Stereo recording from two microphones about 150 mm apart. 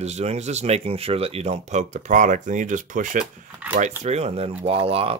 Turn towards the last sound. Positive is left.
turn(degrees=-40)  # may be behind; listen again after turning